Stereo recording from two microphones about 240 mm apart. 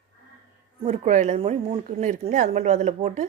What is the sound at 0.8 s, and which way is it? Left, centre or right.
Speech, right.